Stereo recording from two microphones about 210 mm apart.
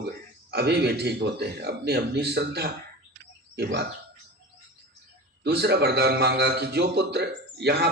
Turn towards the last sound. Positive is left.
turn(degrees=-50)  # may be behind; listen again after turning